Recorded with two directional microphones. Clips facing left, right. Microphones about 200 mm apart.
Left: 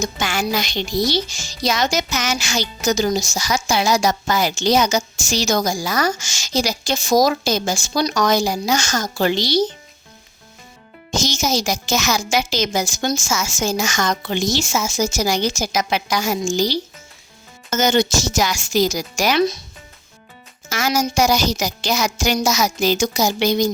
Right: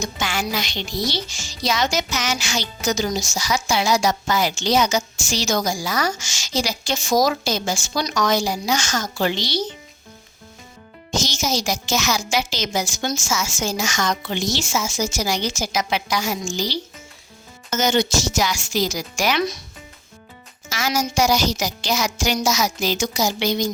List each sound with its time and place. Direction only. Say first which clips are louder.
0.0 s speech: left 3 dB; 45° left (ahead or behind)
11.1 s speech: left 3 dB; 45° left (ahead or behind)
20.7 s speech: left 3 dB; 50° left (ahead or behind)